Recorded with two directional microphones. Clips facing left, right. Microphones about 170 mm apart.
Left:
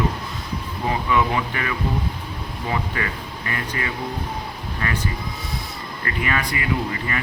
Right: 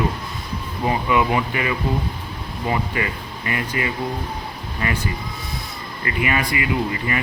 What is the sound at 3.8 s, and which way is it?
Speech, 15° right (ahead or behind).